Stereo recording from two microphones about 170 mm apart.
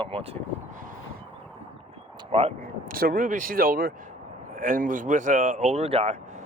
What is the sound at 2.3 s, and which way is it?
Speech, 35° right (ahead or behind).